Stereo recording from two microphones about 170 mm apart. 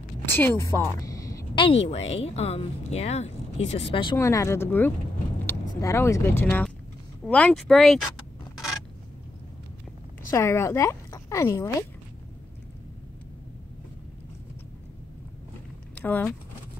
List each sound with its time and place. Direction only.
0.2 s speech: 10° left (ahead or behind); by 4.2 s 30° left (ahead or behind)
4.2 s speech: 15° left (ahead or behind)
10.3 s speech: 15° left (ahead or behind)
15.9 s speech: 10° left (ahead or behind)